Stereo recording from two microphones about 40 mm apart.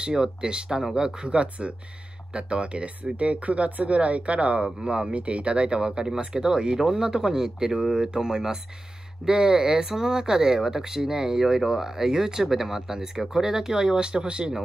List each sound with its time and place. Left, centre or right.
0.0 s speech: right
13.9 s speech: right